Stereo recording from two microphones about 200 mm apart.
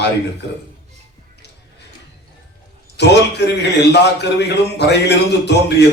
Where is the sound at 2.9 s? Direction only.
60° left (ahead or behind).